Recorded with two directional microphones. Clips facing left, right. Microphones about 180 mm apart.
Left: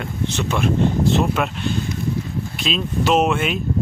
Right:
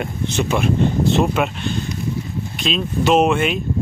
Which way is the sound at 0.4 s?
5° right (ahead or behind).